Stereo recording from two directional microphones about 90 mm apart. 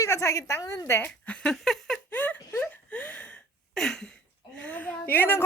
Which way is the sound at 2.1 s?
20° left (ahead or behind).